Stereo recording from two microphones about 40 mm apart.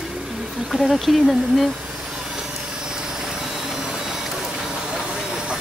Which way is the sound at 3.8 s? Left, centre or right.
Centre.